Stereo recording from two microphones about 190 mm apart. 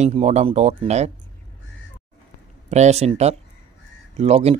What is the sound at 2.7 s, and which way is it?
Speech, 35° right (ahead or behind).